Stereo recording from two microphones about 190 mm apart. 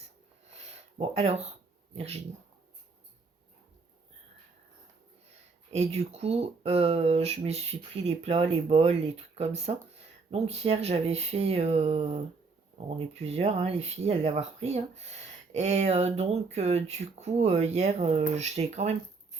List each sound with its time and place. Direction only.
0.6 s a sound: 35° right (ahead or behind)
2.0 s speech: 35° right (ahead or behind)
5.7 s speech: 35° right (ahead or behind)